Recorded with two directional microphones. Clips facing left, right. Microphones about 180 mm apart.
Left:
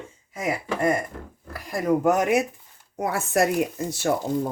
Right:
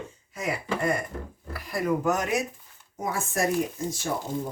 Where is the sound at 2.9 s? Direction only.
70° left (ahead or behind).